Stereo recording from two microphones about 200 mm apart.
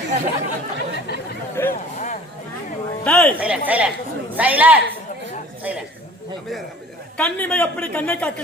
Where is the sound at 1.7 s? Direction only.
40° left (ahead or behind).